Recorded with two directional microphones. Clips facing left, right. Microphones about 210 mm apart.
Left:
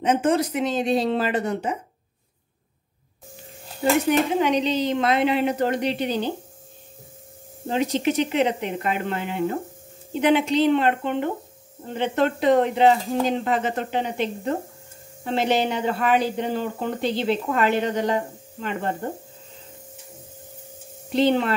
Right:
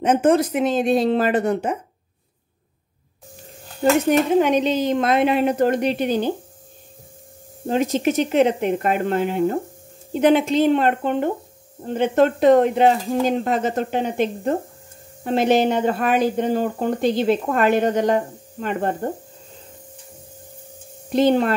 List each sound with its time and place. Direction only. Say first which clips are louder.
0.0 s speech: right 4 dB; 50° right (ahead or behind)
4.4 s speech: right 3 dB; 50° right (ahead or behind)
7.7 s speech: right 3 dB; 50° right (ahead or behind)
21.1 s speech: right 3 dB; 45° right (ahead or behind)